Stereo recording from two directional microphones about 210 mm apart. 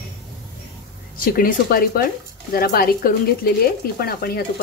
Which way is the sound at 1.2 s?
45° left (ahead or behind).